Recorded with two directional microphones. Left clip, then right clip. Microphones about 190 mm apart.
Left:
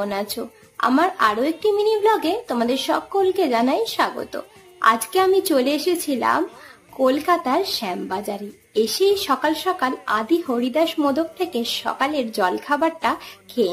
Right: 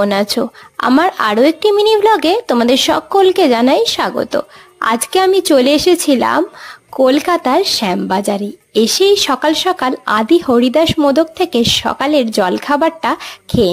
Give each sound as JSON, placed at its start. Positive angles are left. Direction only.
{"t": 0.0, "sound": "speech", "side_deg": -45}